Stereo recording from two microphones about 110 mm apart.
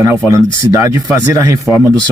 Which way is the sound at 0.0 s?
30° right (ahead or behind).